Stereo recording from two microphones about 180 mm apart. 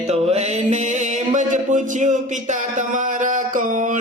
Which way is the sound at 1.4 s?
45° right (ahead or behind).